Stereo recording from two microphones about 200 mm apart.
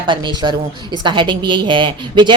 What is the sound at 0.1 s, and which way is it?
A woman's voice, 25° right (ahead or behind).